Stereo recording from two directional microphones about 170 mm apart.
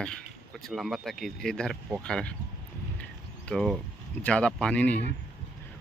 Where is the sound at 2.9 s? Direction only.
5° left (ahead or behind).